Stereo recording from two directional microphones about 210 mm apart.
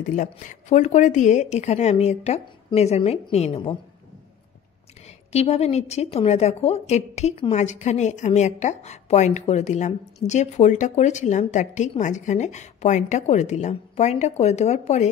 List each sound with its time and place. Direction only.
0.1 s a woman's voice: 35° left (ahead or behind)
5.0 s a woman's voice: 30° left (ahead or behind)